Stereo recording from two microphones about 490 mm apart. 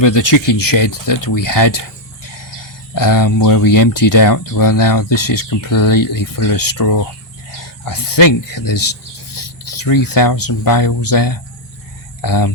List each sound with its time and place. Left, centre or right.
0.0 s speech: left
2.9 s speech: left